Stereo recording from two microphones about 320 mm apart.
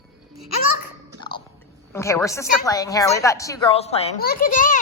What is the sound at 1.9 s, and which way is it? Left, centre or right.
Speech, centre.